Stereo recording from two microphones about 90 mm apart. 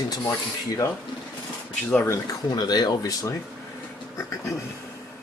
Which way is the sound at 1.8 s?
20° left (ahead or behind).